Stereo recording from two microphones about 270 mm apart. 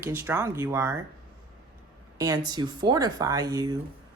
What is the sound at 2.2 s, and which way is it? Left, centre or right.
Speech, centre.